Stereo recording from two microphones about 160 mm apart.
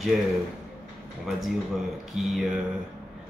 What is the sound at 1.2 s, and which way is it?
Speech, centre (ahead or behind).